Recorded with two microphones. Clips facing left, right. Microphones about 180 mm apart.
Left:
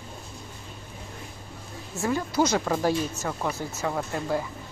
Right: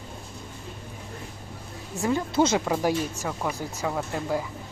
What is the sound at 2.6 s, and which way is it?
Speech, 15° right (ahead or behind).